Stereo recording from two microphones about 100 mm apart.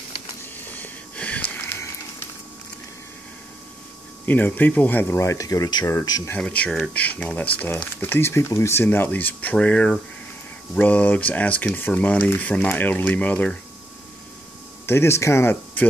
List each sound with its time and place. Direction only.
0.7 s wheeze: 15° left (ahead or behind)
4.3 s speech: 20° left (ahead or behind); by 5.9 s 40° left (ahead or behind)
6.3 s speech: 15° left (ahead or behind)
14.9 s speech: 25° left (ahead or behind)